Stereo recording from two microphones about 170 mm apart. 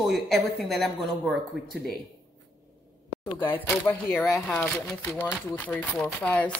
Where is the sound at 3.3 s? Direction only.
30° left (ahead or behind).